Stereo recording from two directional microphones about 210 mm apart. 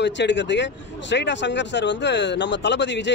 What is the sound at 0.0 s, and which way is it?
Speech, 55° left (ahead or behind).